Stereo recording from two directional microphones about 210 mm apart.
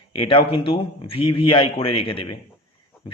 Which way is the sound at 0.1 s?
25° left (ahead or behind).